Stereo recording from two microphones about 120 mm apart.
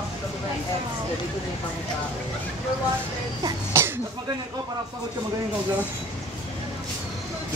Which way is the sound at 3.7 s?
20° right (ahead or behind).